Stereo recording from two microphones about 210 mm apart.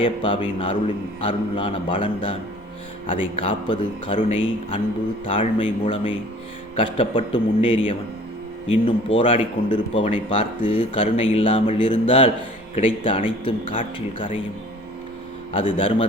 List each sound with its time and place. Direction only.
0.0 s speech: 25° left (ahead or behind)
15.5 s speech: 25° left (ahead or behind)